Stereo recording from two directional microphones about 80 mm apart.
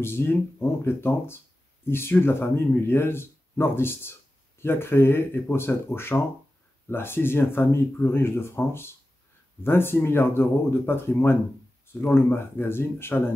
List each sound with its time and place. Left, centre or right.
0.0 s speech: left